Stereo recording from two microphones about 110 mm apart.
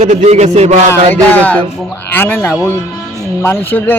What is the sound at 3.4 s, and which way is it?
Music, 20° left (ahead or behind).